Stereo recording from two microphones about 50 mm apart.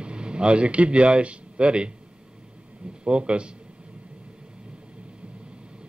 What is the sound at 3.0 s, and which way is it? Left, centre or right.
Speech, right.